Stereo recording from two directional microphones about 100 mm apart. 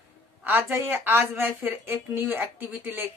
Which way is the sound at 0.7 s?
20° right (ahead or behind).